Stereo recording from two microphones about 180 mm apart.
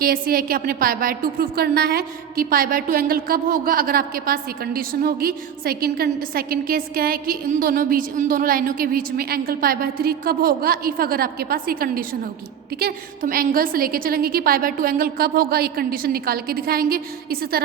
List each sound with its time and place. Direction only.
0.0 s a woman's voice: 55° right (ahead or behind)